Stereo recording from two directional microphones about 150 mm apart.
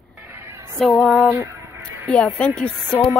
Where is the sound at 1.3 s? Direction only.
20° right (ahead or behind).